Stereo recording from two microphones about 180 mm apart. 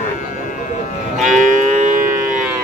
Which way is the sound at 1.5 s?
45° right (ahead or behind).